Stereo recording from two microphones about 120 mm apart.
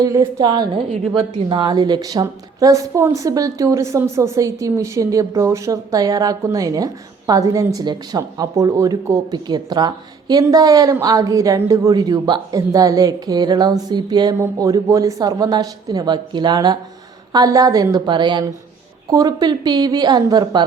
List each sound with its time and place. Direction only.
0.0 s a woman's voice: 30° right (ahead or behind)